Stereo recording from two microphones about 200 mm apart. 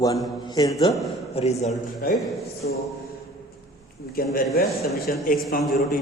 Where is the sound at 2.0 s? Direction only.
45° left (ahead or behind).